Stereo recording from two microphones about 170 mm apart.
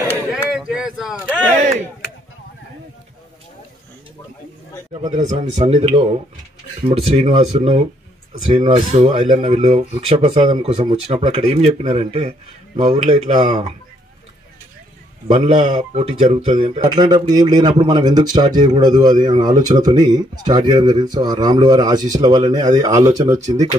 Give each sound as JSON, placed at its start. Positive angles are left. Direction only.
{"t": 0.3, "sound": "a sound", "side_deg": -5}
{"t": 5.0, "sound": "speech", "side_deg": -45}
{"t": 8.7, "sound": "speech", "side_deg": -45}
{"t": 13.3, "sound": "speech", "side_deg": -30}
{"t": 15.2, "sound": "speech", "side_deg": -40}
{"t": 16.9, "sound": "speech", "side_deg": -25}